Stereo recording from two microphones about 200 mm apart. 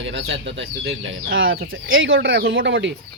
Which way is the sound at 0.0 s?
65° right (ahead or behind).